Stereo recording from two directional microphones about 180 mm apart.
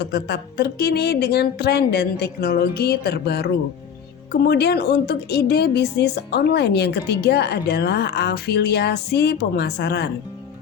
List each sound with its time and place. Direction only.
0.0 s a woman's voice: 65° left (ahead or behind)